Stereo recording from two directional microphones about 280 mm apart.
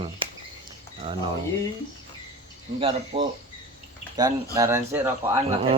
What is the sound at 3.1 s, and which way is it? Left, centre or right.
Speech, right.